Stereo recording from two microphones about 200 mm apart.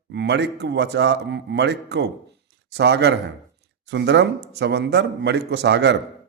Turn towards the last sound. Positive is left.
turn(degrees=-60)  # may be behind; listen again after turning